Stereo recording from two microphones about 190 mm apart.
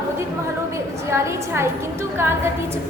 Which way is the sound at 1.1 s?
15° right (ahead or behind).